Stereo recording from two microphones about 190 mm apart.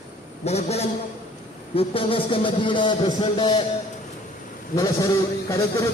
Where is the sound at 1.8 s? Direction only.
30° left (ahead or behind).